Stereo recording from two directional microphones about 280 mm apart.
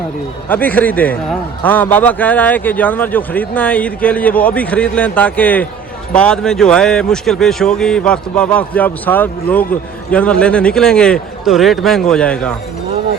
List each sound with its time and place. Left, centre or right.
0.4 s a man's voice: centre